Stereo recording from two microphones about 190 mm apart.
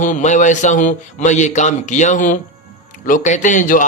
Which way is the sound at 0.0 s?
40° left (ahead or behind).